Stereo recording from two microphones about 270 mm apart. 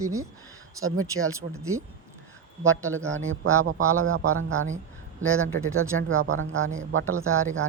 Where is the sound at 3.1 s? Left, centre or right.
Right.